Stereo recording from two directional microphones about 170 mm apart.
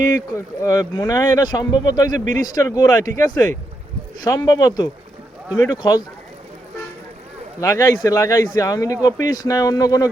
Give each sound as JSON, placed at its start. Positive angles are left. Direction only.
{"t": 0.3, "sound": "speech", "side_deg": 20}
{"t": 7.6, "sound": "speech", "side_deg": 20}